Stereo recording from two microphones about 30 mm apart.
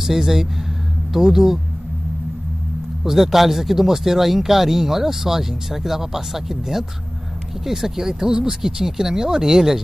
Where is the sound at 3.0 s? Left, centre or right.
Centre.